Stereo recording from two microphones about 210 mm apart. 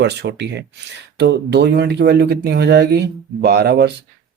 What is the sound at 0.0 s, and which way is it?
Speech, 55° right (ahead or behind).